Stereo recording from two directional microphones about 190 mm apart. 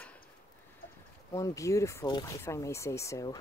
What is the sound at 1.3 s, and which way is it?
Speech, 15° left (ahead or behind).